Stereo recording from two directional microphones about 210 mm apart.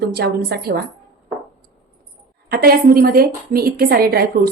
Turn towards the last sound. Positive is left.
turn(degrees=-45)  # may be behind; listen again after turning